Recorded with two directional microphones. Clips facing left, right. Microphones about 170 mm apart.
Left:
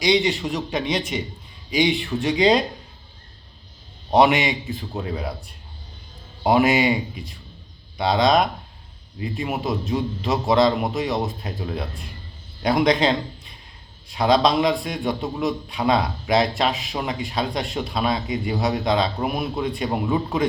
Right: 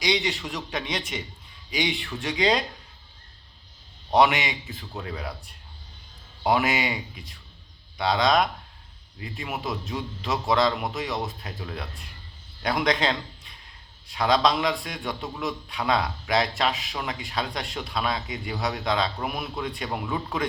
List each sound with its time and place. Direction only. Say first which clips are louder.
0.1 s a man's voice: left 7 dB; 30° left (ahead or behind)
4.1 s a man's voice: left 4 dB; 30° left (ahead or behind)
6.4 s a man's voice: left 6 dB; 35° left (ahead or behind)